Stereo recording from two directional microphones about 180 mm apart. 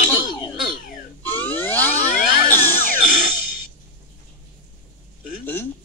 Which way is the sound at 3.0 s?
50° left (ahead or behind).